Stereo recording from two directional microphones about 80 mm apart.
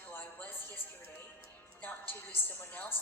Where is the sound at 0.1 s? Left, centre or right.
Left.